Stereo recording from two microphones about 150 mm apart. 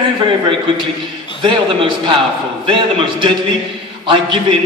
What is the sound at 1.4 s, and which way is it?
A man's voice, 35° right (ahead or behind).